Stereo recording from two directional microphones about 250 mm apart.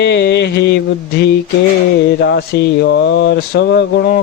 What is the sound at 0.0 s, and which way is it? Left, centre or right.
Speech, left.